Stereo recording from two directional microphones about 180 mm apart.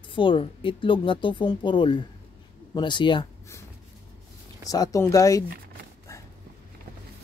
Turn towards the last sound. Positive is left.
turn(degrees=20)  # may be behind; listen again after turning